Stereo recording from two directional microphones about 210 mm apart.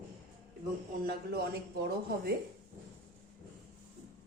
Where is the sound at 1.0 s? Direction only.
45° right (ahead or behind).